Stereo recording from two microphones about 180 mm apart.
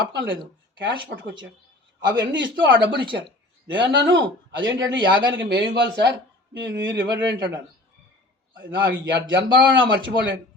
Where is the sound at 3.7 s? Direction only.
90° right; by 6.1 s 75° right (ahead or behind).